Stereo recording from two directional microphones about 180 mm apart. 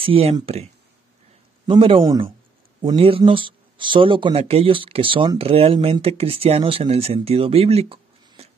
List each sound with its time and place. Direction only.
0.0 s speech: 30° right (ahead or behind)
1.7 s speech: 30° right (ahead or behind)